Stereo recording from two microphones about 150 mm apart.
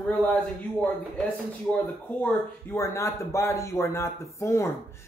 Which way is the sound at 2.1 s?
15° left (ahead or behind).